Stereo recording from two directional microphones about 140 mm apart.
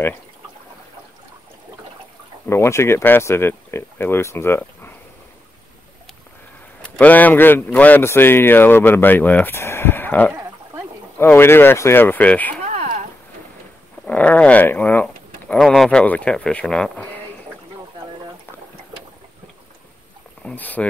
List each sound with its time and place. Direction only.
2.5 s a man's voice: 20° left (ahead or behind)
6.8 s a man's voice: 10° left (ahead or behind)
10.3 s a sound: 20° right (ahead or behind)
11.1 s a man's voice: 15° left (ahead or behind)
12.6 s a sound: 60° right (ahead or behind)
14.0 s a man's voice: 10° left (ahead or behind)
20.4 s a man's voice: 10° left (ahead or behind)